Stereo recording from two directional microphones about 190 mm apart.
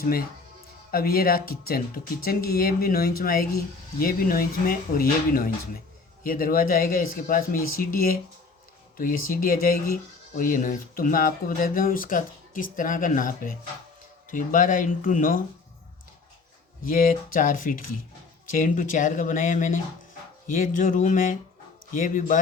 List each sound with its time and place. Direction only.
0.9 s speech: 50° left (ahead or behind)
16.8 s speech: 45° left (ahead or behind)